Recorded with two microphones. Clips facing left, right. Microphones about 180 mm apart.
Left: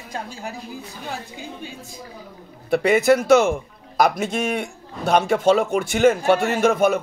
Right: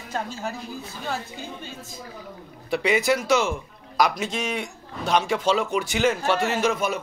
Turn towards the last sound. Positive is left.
turn(degrees=55)  # may be behind; listen again after turning